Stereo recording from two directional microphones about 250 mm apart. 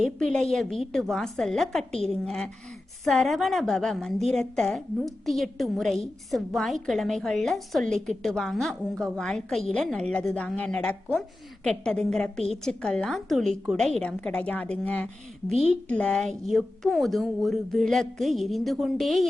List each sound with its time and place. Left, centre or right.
0.0 s a woman's voice: centre